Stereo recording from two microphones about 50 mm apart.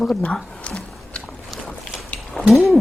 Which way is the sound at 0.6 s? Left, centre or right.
Left.